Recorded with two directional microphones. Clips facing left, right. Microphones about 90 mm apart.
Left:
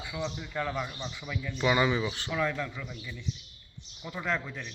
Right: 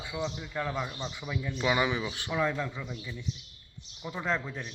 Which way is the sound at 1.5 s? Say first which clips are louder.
Left 2 dB; 5° right (ahead or behind).